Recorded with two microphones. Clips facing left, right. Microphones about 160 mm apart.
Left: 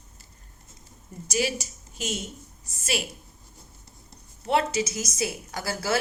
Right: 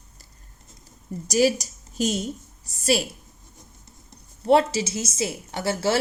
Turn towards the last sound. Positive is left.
turn(degrees=-25)  # may be behind; listen again after turning